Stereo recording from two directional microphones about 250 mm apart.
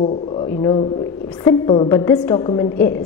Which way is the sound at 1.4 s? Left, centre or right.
Centre.